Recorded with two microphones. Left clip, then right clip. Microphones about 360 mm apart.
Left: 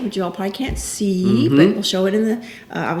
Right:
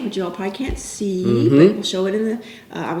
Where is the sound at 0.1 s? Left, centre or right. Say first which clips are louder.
Even; left.